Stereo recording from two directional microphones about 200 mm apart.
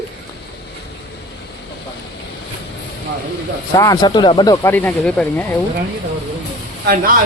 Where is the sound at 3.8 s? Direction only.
20° left (ahead or behind).